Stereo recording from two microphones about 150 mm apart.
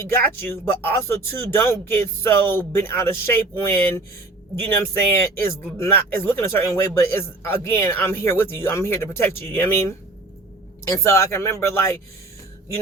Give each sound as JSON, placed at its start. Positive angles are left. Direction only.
{"t": 0.0, "sound": "speech", "side_deg": 15}